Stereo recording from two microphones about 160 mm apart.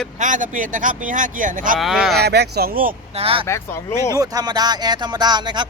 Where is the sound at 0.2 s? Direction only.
55° right (ahead or behind).